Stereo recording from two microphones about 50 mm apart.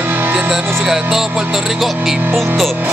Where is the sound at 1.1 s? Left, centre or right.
Centre.